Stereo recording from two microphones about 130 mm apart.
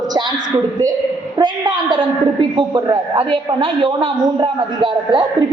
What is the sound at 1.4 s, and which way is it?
A woman's voice, 35° right (ahead or behind).